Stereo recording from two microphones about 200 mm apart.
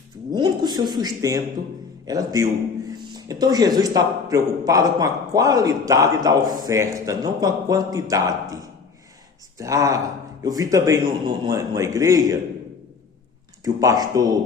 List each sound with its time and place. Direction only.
0.3 s speech: 20° right (ahead or behind)
13.7 s speech: 20° right (ahead or behind)